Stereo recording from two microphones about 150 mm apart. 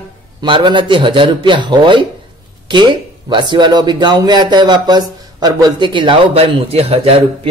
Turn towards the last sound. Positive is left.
turn(degrees=-40)  # may be behind; listen again after turning